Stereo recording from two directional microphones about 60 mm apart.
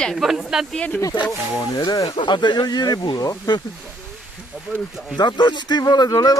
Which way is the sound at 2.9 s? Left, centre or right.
Left.